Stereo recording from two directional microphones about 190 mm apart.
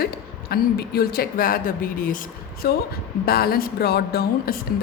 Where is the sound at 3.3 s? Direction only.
55° left (ahead or behind).